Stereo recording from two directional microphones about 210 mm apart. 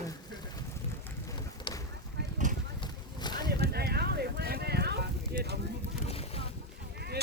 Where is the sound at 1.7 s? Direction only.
25° left (ahead or behind).